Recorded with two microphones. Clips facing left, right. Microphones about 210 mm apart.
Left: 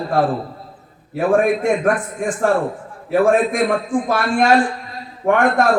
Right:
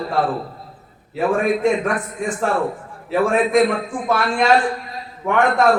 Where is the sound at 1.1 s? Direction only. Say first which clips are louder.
Left 3 dB; 50° left (ahead or behind).